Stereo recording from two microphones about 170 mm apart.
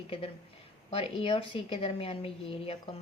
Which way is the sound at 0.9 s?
35° left (ahead or behind).